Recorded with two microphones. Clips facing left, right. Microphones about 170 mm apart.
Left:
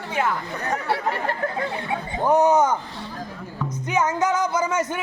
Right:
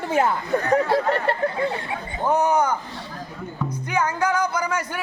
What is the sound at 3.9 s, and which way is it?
Music, 20° left (ahead or behind).